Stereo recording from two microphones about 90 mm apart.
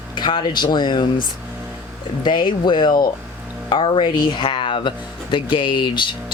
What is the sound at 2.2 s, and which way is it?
Speech, 60° left (ahead or behind).